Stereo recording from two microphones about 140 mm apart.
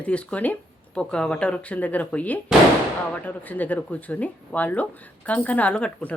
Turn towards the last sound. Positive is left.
turn(degrees=5)  # may be behind; listen again after turning